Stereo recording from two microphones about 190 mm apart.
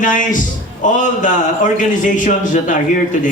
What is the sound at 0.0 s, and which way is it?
A man's voice, 45° left (ahead or behind).